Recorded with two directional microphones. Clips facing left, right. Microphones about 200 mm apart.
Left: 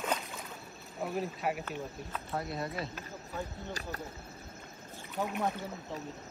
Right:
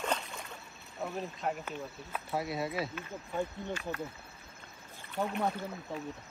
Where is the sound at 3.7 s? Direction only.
40° left (ahead or behind).